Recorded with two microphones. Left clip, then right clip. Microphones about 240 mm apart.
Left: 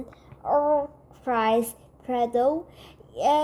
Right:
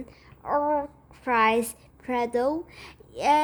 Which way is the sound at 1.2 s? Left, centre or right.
Centre.